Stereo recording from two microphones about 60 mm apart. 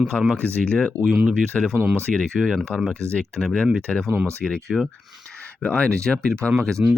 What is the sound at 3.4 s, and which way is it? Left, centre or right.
Speech, centre.